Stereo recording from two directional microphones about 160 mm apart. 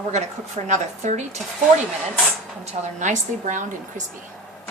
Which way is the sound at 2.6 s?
45° right (ahead or behind).